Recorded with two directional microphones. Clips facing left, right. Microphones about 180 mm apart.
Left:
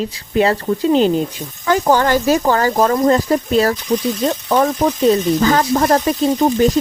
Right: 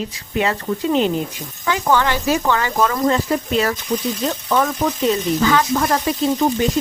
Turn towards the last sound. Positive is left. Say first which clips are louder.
# left 3 dB
turn(degrees=40)  # may be behind; listen again after turning